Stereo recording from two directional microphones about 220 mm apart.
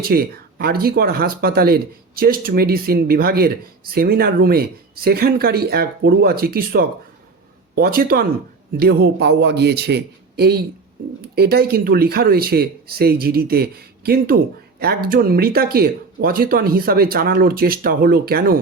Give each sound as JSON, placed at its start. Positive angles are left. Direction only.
{"t": 0.0, "sound": "speech", "side_deg": -45}